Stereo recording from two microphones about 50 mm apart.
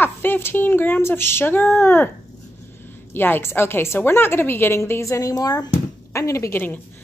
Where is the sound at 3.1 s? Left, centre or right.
Left.